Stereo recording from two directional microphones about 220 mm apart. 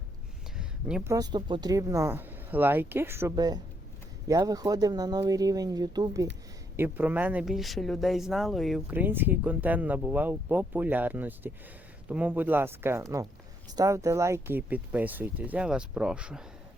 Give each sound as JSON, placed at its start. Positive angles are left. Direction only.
{"t": 0.6, "sound": "a sound", "side_deg": -5}
{"t": 1.1, "sound": "speech", "side_deg": -20}
{"t": 6.7, "sound": "speech", "side_deg": -10}